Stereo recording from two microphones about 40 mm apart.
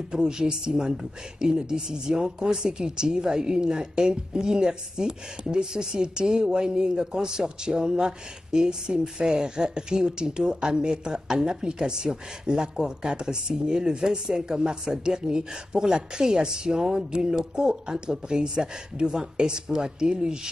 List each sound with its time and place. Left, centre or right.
0.1 s speech: centre